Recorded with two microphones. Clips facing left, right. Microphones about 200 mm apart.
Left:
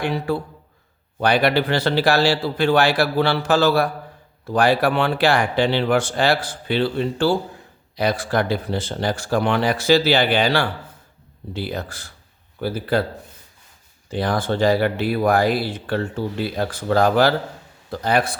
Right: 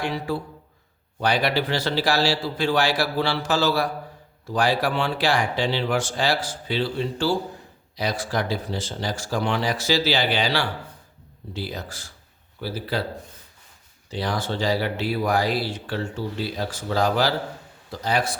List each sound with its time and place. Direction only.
0.3 s speech: 60° left (ahead or behind)
14.1 s speech: 50° left (ahead or behind)